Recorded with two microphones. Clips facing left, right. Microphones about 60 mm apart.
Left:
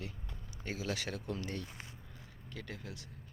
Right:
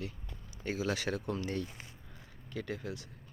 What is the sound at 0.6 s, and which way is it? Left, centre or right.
Speech, centre.